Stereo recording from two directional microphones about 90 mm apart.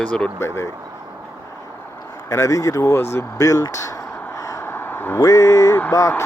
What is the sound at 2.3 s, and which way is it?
Speech, 35° left (ahead or behind).